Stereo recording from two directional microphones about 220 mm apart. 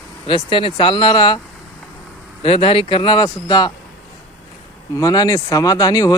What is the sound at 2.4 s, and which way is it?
Speech, 25° left (ahead or behind).